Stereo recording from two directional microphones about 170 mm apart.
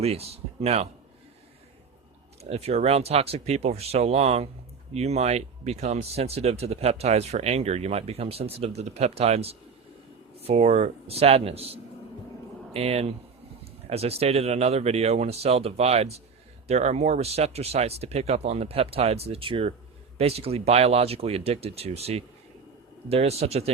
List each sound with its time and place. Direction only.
0.0 s speech: 35° right (ahead or behind)
2.4 s speech: 35° right (ahead or behind)